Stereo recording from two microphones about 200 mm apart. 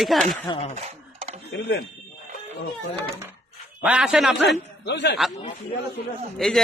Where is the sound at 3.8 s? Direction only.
5° right (ahead or behind).